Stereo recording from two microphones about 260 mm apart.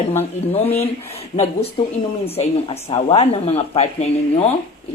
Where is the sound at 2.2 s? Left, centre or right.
Left.